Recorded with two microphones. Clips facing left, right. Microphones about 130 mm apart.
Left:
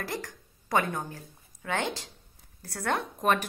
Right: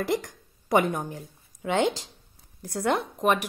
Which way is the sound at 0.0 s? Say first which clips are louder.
Right 8 dB; 20° right (ahead or behind).